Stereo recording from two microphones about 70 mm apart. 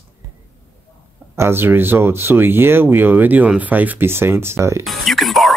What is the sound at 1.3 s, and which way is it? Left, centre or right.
Speech, right.